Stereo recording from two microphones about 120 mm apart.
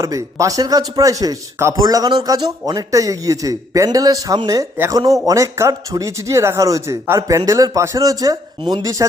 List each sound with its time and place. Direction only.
0.0 s a man's voice: 25° right (ahead or behind)